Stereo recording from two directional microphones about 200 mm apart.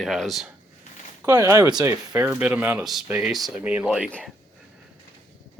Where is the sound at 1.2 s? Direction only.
15° right (ahead or behind); by 4.3 s centre (ahead or behind).